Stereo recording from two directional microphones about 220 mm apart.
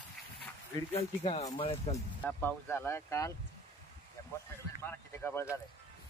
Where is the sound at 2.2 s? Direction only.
10° left (ahead or behind).